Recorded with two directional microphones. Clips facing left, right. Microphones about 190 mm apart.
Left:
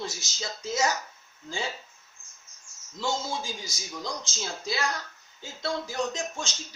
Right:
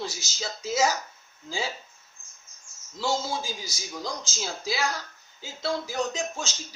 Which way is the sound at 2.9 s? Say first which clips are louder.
Right 2 dB; 5° right (ahead or behind).